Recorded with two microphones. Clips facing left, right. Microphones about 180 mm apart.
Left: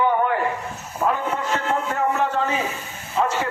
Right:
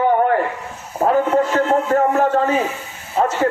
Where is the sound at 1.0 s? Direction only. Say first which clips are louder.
Right 5 dB; 40° right (ahead or behind).